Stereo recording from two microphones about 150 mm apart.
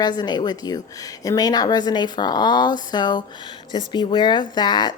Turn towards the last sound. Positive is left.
turn(degrees=30)  # may be behind; listen again after turning